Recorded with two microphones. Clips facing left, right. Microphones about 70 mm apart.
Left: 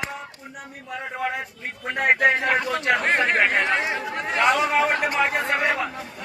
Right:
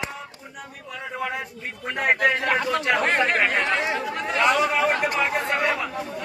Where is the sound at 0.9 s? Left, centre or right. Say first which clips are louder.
Left 2 dB; left.